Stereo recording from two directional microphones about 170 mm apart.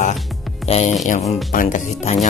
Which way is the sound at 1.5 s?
50° left (ahead or behind).